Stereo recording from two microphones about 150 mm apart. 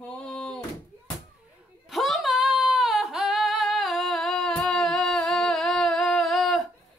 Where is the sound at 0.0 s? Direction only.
5° left (ahead or behind).